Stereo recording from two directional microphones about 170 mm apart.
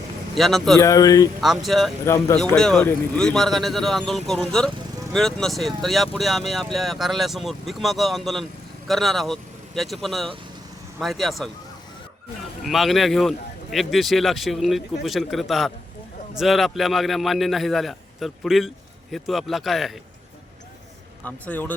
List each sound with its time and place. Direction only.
0.3 s a man's voice: centre (ahead or behind)
0.8 s speech: 20° left (ahead or behind)
1.4 s a man's voice: centre (ahead or behind)
2.0 s speech: 20° left (ahead or behind)
2.6 s a man's voice: 5° left (ahead or behind)
12.6 s a man's voice: centre (ahead or behind)
21.2 s speech: 10° left (ahead or behind)